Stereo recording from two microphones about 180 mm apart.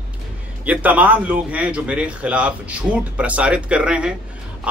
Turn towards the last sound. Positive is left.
turn(degrees=-5)  # may be behind; listen again after turning